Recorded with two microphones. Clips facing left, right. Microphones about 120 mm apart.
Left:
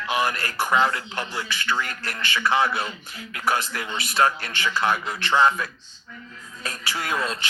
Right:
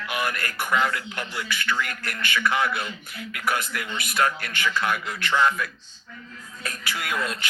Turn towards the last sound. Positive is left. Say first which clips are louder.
# left 2 dB
turn(degrees=30)  # may be behind; listen again after turning